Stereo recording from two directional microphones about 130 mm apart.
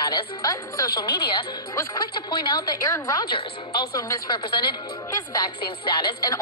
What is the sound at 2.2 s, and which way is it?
Speech, 35° left (ahead or behind).